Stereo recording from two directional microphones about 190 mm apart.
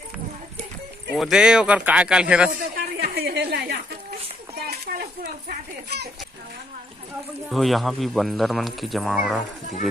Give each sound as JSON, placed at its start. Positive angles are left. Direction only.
{"t": 1.1, "sound": "speech", "side_deg": 0}
{"t": 2.5, "sound": "a sound", "side_deg": -55}
{"t": 5.5, "sound": "children playing", "side_deg": -60}
{"t": 7.5, "sound": "speech", "side_deg": 0}